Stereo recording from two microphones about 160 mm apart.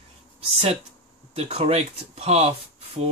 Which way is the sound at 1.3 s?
40° right (ahead or behind).